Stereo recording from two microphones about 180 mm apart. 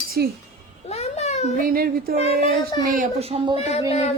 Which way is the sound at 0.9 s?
35° left (ahead or behind).